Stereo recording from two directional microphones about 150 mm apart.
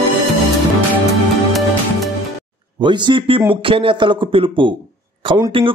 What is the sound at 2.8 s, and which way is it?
A man's voice, 30° right (ahead or behind).